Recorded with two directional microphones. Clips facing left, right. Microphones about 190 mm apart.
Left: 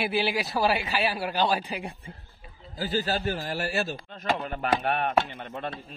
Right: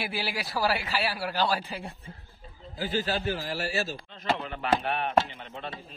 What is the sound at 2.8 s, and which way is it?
A man's voice, 45° left (ahead or behind).